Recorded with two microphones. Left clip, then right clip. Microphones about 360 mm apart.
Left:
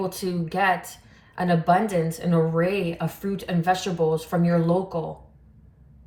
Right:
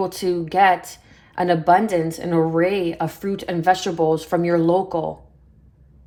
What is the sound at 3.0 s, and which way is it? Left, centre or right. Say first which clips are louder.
Speech: right 5 dB; centre.